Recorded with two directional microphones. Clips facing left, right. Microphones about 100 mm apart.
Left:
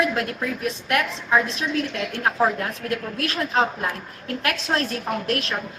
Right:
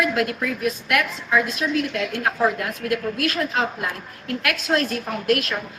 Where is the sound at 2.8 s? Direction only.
30° left (ahead or behind).